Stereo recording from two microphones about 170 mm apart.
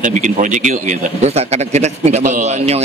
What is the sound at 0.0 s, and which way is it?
A man's voice, 45° right (ahead or behind).